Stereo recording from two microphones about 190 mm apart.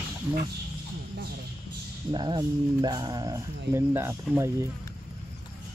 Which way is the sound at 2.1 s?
25° right (ahead or behind).